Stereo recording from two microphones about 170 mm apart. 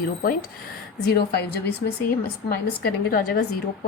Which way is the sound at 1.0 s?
70° left (ahead or behind).